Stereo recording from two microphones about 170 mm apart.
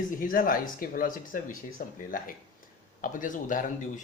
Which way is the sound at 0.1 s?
55° left (ahead or behind).